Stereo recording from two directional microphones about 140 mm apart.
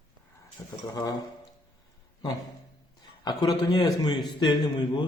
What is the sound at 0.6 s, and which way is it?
Speech, 15° left (ahead or behind).